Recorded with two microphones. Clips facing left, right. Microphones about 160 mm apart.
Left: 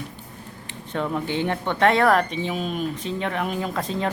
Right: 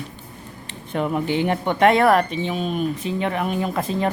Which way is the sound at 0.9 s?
15° right (ahead or behind).